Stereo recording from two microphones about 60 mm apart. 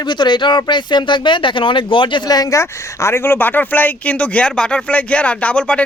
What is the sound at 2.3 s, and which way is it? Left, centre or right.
Speech, left.